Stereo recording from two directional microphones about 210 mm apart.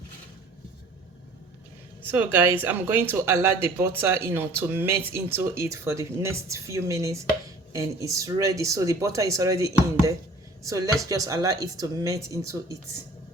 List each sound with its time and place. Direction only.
2.0 s speech: 10° right (ahead or behind)